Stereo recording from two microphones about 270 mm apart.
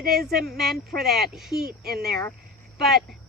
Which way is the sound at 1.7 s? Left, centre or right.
Right.